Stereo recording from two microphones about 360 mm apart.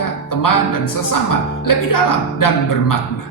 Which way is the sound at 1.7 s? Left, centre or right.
Left.